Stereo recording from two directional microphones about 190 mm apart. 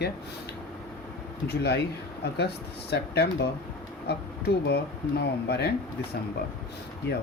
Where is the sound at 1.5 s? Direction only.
60° left (ahead or behind).